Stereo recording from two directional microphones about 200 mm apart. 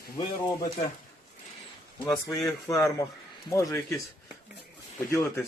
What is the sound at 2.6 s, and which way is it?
Speech, 15° left (ahead or behind).